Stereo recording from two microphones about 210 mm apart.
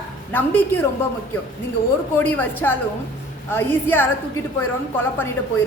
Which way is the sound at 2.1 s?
10° left (ahead or behind).